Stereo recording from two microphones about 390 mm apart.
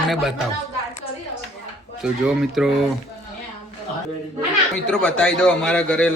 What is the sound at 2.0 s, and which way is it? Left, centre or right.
Speech, centre.